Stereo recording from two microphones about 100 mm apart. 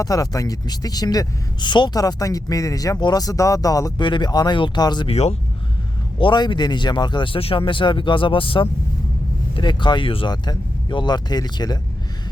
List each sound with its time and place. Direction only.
0.0 s speech: 35° left (ahead or behind)
4.0 s speech: 50° left (ahead or behind)
5.0 s speech: 90° left
6.1 s speech: 50° left (ahead or behind)
10.3 s speech: 45° left (ahead or behind)